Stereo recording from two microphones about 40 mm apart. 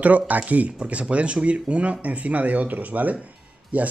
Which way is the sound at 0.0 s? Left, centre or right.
Right.